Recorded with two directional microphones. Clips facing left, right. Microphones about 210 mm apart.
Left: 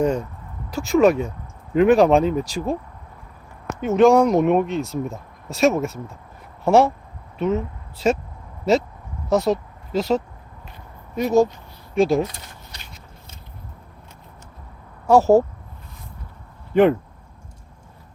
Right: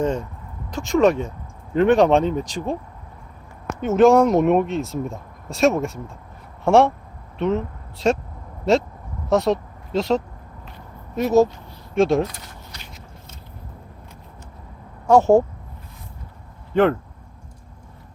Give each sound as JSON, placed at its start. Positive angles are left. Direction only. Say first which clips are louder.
{"t": 0.0, "sound": "speech", "louder": "left 2 dB", "side_deg": 10}
{"t": 3.8, "sound": "speech", "louder": "even", "side_deg": 0}
{"t": 9.3, "sound": "speech", "louder": "even", "side_deg": 0}
{"t": 15.0, "sound": "speech", "louder": "even", "side_deg": 5}
{"t": 16.7, "sound": "speech", "louder": "left 2 dB", "side_deg": 15}